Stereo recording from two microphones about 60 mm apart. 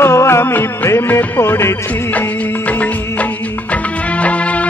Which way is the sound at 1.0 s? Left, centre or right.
Left.